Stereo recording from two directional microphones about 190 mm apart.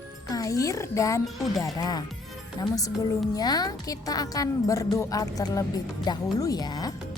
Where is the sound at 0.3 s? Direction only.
20° left (ahead or behind).